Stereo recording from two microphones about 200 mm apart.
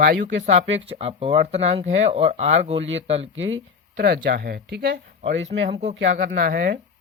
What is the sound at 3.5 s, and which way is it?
Speech, 55° right (ahead or behind).